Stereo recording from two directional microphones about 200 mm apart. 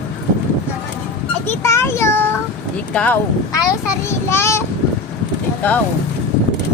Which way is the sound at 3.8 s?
15° left (ahead or behind).